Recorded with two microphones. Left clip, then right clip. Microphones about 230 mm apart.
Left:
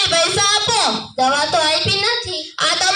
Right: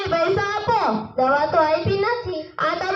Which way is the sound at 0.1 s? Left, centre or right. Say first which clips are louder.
Left 5 dB; left.